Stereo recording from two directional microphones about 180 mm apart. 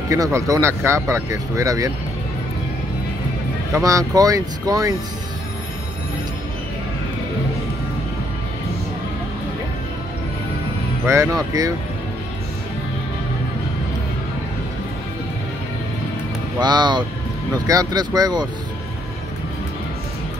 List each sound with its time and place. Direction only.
0.1 s speech: 15° right (ahead or behind)
3.7 s speech: 20° right (ahead or behind)
11.1 s speech: 20° right (ahead or behind)
16.5 s speech: 25° right (ahead or behind)